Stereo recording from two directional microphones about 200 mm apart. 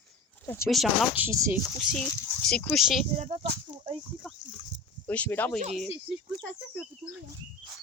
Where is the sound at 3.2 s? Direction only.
30° right (ahead or behind).